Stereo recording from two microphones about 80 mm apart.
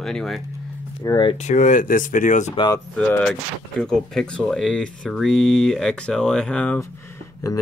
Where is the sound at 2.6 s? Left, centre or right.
Left.